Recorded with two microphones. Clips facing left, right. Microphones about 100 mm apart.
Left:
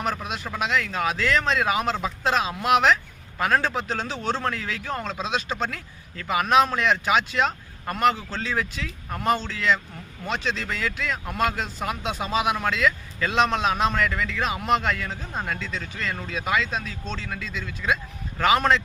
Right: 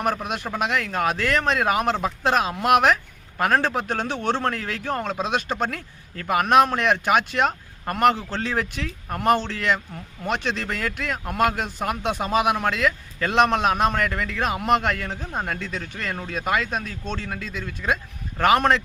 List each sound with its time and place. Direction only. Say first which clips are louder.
0.3 s speech: right 2 dB; 55° right (ahead or behind)